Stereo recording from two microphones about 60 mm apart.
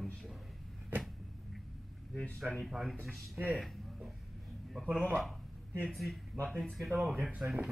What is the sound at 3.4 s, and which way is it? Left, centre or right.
Speech, right.